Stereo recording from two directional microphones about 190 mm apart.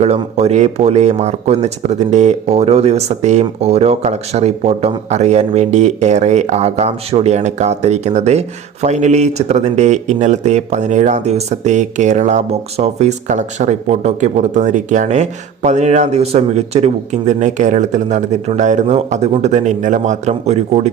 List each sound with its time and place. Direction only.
0.0 s speech: 35° right (ahead or behind)